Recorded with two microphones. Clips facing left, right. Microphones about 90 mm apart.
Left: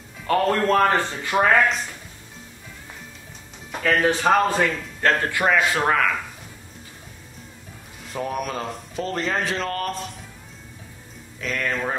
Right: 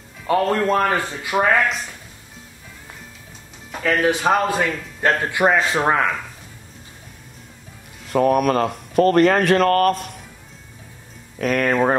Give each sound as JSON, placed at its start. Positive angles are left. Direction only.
{"t": 0.3, "sound": "a man's voice", "side_deg": -10}
{"t": 1.3, "sound": "speech", "side_deg": 0}
{"t": 4.0, "sound": "a man's voice", "side_deg": -10}
{"t": 5.3, "sound": "speech", "side_deg": -20}
{"t": 8.1, "sound": "speech", "side_deg": -60}
{"t": 11.3, "sound": "speech", "side_deg": -55}